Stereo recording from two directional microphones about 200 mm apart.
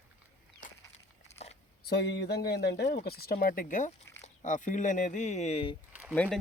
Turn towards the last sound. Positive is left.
turn(degrees=5)  # may be behind; listen again after turning